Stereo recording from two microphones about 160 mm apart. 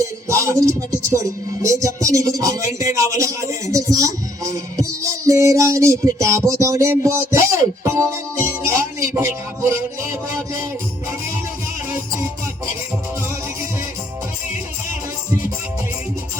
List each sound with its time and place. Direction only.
0.3 s speech: 20° right (ahead or behind)
7.9 s music: 15° right (ahead or behind)